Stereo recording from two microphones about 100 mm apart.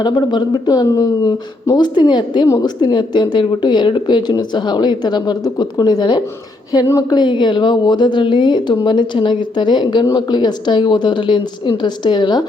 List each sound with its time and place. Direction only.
0.0 s speech: 50° left (ahead or behind)